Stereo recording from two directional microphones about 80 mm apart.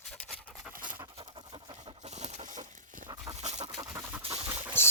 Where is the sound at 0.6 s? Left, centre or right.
Centre.